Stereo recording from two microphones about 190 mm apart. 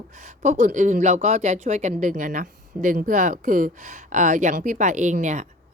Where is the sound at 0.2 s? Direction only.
40° right (ahead or behind).